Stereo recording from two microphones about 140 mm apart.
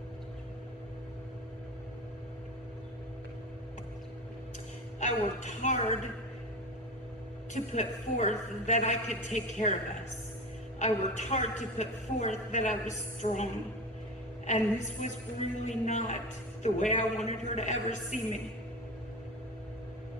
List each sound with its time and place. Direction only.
5.0 s a woman's voice: 60° left (ahead or behind)
7.5 s a woman's voice: 55° left (ahead or behind)
10.8 s a woman's voice: 55° left (ahead or behind)